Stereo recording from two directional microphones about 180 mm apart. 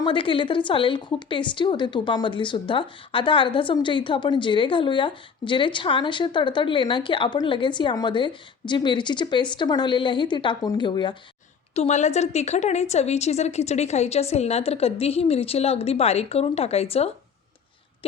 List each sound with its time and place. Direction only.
0.0 s a woman's voice: 30° left (ahead or behind)
11.7 s a woman's voice: 40° left (ahead or behind)